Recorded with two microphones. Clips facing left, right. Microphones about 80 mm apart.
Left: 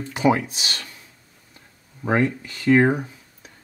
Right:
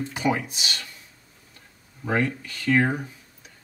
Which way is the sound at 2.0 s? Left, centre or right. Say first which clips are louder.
Left 4 dB; left.